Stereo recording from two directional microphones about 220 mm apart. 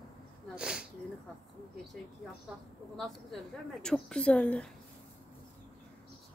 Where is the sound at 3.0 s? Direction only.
Centre (ahead or behind).